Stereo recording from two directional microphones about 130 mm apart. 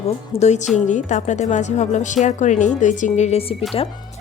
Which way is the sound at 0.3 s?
60° left (ahead or behind).